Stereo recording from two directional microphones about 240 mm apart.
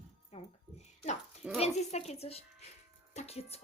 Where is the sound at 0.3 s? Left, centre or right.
Left.